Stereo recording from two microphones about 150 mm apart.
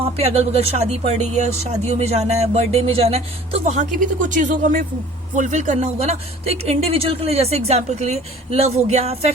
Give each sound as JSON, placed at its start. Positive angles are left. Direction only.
{"t": 0.0, "sound": "a man's voice", "side_deg": -45}
{"t": 3.9, "sound": "a man's voice", "side_deg": -60}